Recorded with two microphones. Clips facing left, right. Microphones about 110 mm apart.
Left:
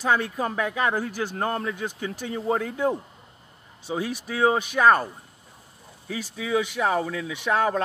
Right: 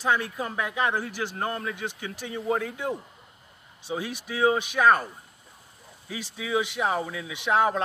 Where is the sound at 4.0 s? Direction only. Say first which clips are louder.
Left 3 dB; 40° left (ahead or behind).